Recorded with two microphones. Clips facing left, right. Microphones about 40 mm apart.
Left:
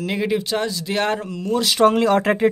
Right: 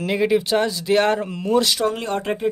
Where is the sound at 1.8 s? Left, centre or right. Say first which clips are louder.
Left 7 dB; left.